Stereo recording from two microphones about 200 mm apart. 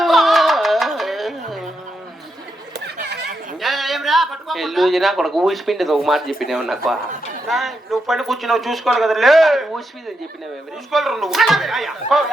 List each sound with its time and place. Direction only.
0.0 s music: centre (ahead or behind)
2.7 s a sound: 55° right (ahead or behind)
3.6 s a man's voice: centre (ahead or behind)
10.9 s speech: centre (ahead or behind)